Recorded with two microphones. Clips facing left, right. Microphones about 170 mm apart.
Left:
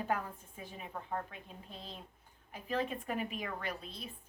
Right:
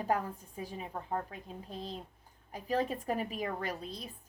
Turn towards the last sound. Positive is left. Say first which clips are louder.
# right 3 dB
turn(degrees=-40)  # may be behind; listen again after turning